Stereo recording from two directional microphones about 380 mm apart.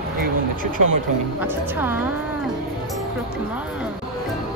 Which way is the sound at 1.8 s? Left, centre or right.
Centre.